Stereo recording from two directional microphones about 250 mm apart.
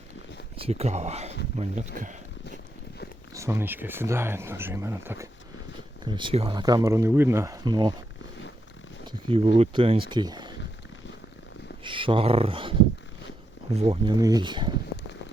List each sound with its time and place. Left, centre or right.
0.5 s speech: right
3.3 s speech: centre
9.6 s speech: right
11.8 s speech: centre